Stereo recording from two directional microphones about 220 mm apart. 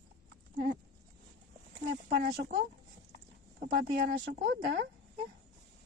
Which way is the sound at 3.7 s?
45° right (ahead or behind).